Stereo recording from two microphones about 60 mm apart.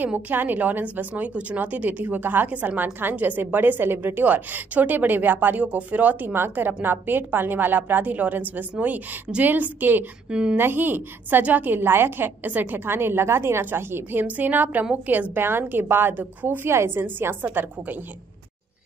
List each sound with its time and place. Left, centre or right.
0.0 s a woman's voice: right
10.3 s a woman's voice: centre
10.6 s a woman's voice: right